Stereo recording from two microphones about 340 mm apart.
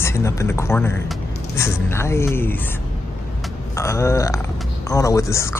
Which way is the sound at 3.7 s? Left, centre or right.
Centre.